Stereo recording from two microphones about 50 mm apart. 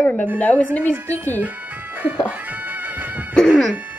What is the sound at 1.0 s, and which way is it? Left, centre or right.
Speech, right.